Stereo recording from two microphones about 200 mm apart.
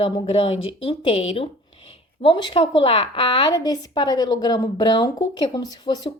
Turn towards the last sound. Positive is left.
turn(degrees=20)  # may be behind; listen again after turning